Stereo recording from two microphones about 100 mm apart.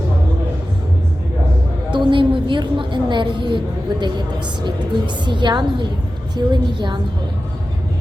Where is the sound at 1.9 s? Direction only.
55° right (ahead or behind).